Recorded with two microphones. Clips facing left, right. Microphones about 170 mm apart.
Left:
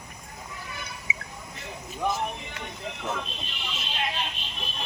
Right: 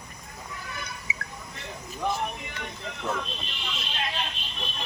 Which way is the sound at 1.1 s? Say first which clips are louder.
Left 3 dB; 35° right (ahead or behind).